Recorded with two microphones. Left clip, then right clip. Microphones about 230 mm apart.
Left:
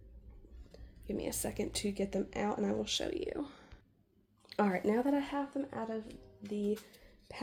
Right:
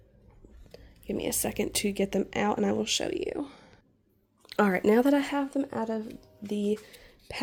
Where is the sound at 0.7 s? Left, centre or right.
Right.